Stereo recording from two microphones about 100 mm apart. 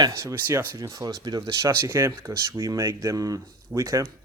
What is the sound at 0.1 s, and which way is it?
Speech, 30° right (ahead or behind).